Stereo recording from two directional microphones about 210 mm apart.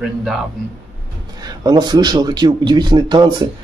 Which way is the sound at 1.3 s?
20° right (ahead or behind).